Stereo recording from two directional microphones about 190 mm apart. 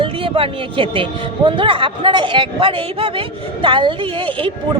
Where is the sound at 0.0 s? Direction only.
30° right (ahead or behind).